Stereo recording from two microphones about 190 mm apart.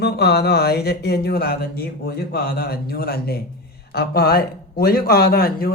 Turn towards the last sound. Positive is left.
turn(degrees=50)  # may be behind; listen again after turning